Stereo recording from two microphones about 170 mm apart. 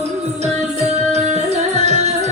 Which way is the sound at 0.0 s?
40° right (ahead or behind).